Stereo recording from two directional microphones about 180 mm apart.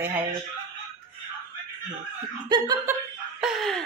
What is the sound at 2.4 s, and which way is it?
Laughter, 20° right (ahead or behind).